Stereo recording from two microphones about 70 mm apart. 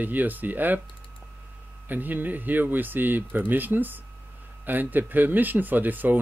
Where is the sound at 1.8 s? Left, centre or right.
Right.